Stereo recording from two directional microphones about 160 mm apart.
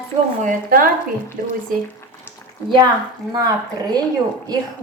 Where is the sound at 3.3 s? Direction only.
25° right (ahead or behind).